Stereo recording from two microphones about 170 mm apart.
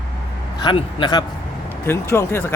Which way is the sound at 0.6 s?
30° left (ahead or behind).